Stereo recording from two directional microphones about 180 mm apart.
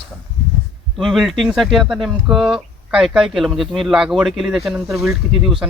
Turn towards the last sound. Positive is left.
turn(degrees=0)  # may be behind; listen again after turning